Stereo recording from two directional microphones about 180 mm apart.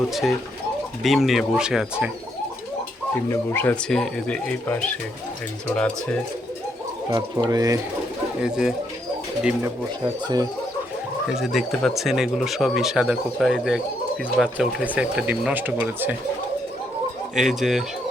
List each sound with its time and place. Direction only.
0.1 s speech: centre (ahead or behind)
3.2 s speech: 10° left (ahead or behind)
7.1 s speech: 20° right (ahead or behind)
8.4 s speech: 5° right (ahead or behind)
11.3 s speech: centre (ahead or behind)
17.3 s speech: centre (ahead or behind)